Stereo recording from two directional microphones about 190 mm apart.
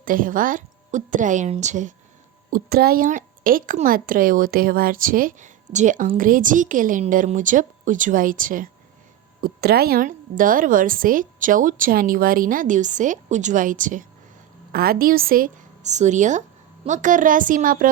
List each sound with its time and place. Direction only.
0.0 s a woman's voice: 45° right (ahead or behind)
2.5 s a woman's voice: 55° right (ahead or behind)